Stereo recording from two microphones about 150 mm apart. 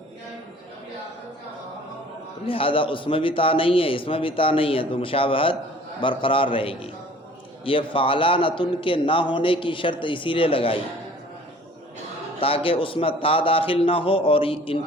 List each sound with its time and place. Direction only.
2.5 s a man's voice: 35° left (ahead or behind)
12.4 s a man's voice: 40° left (ahead or behind)